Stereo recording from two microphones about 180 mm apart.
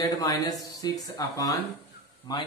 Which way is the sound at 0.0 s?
20° left (ahead or behind).